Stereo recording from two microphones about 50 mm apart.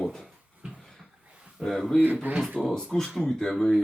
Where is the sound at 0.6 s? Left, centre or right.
Centre.